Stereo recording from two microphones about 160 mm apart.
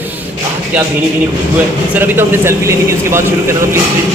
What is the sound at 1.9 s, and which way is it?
A man's voice, 15° right (ahead or behind).